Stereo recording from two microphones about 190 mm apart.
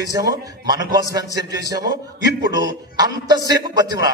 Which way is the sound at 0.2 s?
20° right (ahead or behind).